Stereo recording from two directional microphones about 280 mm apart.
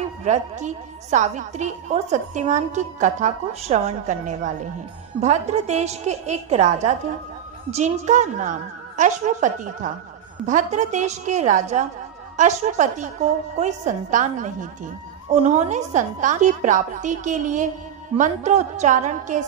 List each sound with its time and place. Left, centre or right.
0.2 s a woman's voice: right